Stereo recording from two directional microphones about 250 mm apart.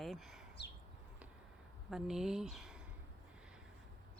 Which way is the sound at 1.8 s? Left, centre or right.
Centre.